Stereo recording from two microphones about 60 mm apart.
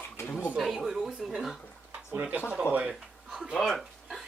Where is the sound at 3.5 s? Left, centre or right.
Centre.